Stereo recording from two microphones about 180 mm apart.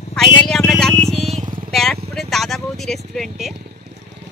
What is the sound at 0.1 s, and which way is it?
Vehicle, 5° left (ahead or behind).